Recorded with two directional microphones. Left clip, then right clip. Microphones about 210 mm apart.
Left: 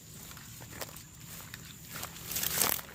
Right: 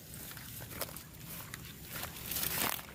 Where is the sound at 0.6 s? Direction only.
10° right (ahead or behind).